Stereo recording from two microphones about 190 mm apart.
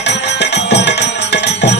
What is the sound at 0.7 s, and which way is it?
Music, 65° left (ahead or behind).